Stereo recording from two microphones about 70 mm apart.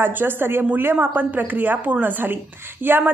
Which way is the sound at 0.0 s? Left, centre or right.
Right.